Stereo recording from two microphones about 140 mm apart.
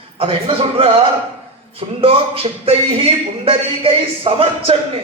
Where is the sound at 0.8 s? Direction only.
40° right (ahead or behind).